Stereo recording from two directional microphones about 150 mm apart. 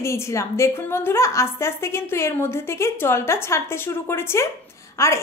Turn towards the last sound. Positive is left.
turn(degrees=20)  # may be behind; listen again after turning